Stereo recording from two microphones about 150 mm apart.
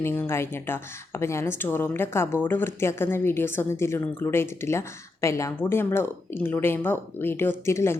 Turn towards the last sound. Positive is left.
turn(degrees=15)  # may be behind; listen again after turning